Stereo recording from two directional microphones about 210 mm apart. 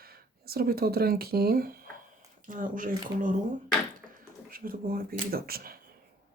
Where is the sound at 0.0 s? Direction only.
45° right (ahead or behind).